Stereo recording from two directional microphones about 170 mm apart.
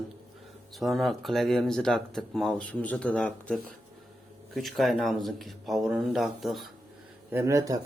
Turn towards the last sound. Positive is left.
turn(degrees=-20)  # may be behind; listen again after turning